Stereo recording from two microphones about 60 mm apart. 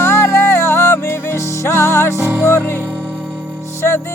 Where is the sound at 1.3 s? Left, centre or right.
Left.